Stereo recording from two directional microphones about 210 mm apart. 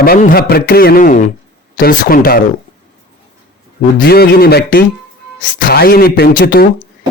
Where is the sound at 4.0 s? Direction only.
50° left (ahead or behind).